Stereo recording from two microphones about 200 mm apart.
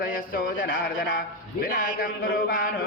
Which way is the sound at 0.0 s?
45° left (ahead or behind).